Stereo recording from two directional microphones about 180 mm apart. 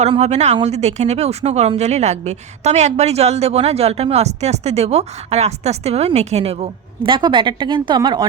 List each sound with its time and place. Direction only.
0.0 s speech: 35° right (ahead or behind)